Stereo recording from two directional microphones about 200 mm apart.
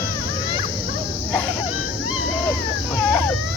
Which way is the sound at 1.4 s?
5° right (ahead or behind).